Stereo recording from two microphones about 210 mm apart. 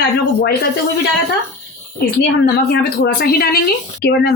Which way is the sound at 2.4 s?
50° left (ahead or behind).